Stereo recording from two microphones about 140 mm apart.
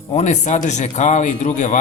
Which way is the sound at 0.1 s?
55° left (ahead or behind).